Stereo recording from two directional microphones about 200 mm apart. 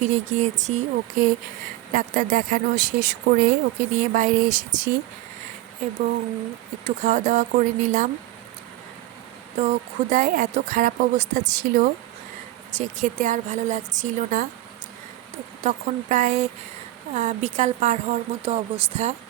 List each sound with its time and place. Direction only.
0.0 s speech: 35° right (ahead or behind)
6.8 s speech: 35° right (ahead or behind)
10.1 s speech: 40° right (ahead or behind)
15.6 s speech: 40° right (ahead or behind)